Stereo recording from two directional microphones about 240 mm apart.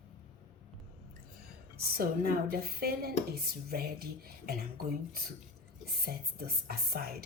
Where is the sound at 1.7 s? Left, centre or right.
Right.